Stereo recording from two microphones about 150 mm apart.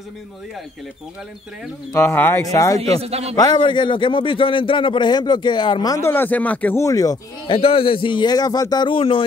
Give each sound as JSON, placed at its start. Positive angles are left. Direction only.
{"t": 2.0, "sound": "speech", "side_deg": 15}
{"t": 3.0, "sound": "a man's voice", "side_deg": -45}
{"t": 3.3, "sound": "a man's voice", "side_deg": 30}
{"t": 7.5, "sound": "a man's voice", "side_deg": 35}